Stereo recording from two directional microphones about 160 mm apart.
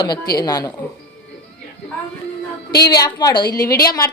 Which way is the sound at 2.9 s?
25° left (ahead or behind).